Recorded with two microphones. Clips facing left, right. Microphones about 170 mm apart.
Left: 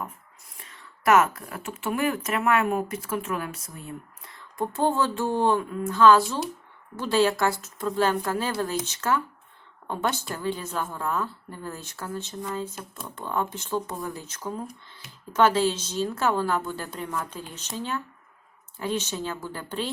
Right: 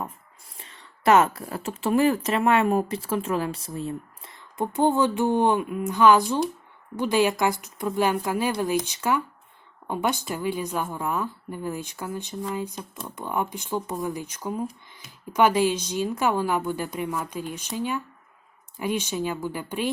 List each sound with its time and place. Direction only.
0.5 s a woman's voice: 30° right (ahead or behind); by 19.9 s 15° right (ahead or behind)